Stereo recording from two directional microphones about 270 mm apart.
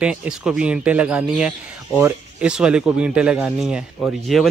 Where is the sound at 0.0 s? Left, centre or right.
Centre.